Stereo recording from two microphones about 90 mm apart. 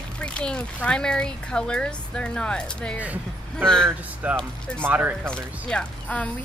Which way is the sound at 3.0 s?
15° right (ahead or behind).